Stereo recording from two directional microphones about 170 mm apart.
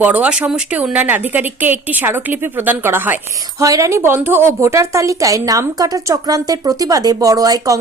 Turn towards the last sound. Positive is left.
turn(degrees=-20)  # may be behind; listen again after turning